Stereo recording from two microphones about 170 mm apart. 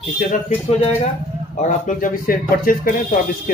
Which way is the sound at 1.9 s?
55° left (ahead or behind).